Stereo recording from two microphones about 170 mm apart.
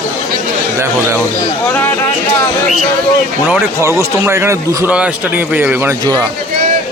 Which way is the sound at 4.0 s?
15° right (ahead or behind).